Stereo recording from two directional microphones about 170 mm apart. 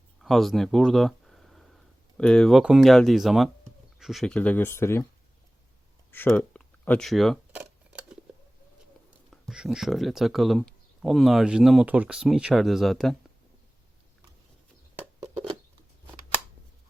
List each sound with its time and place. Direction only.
0.2 s speech: centre (ahead or behind)
6.1 s speech: 10° left (ahead or behind)
7.9 s scissors: 5° right (ahead or behind)
9.3 s speech: centre (ahead or behind)
15.2 s a sound: 20° right (ahead or behind)